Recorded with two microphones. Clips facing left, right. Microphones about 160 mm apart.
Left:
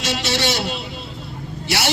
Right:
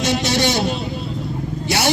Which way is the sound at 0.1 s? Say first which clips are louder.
Right 2 dB; 15° right (ahead or behind).